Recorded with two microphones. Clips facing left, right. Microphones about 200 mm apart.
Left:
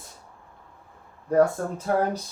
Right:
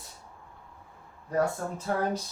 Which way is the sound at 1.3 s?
45° left (ahead or behind).